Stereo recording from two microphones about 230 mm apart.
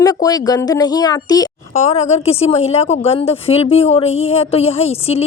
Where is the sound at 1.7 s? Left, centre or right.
Left.